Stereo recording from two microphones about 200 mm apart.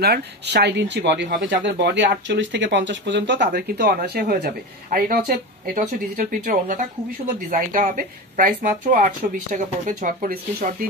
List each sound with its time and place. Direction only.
0.0 s speech: 55° right (ahead or behind)